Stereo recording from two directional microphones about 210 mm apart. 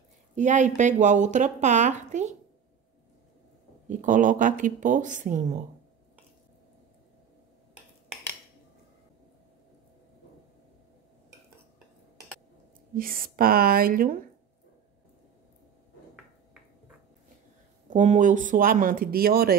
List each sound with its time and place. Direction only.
0.4 s speech: 35° right (ahead or behind)
3.9 s speech: 40° right (ahead or behind)
12.9 s speech: 45° right (ahead or behind)
17.8 s speech: 35° right (ahead or behind)